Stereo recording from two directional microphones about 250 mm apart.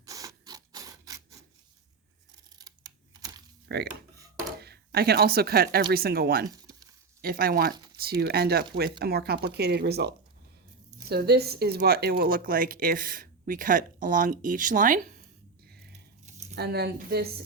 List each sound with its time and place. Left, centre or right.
0.0 s a sound: centre
2.6 s computer keyboard: centre
3.7 s speech: right
4.2 s filing: centre
4.6 s speech: right
16.2 s a sound: right
16.6 s speech: right